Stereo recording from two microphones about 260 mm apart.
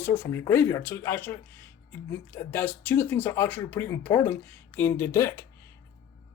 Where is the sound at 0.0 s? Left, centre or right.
Centre.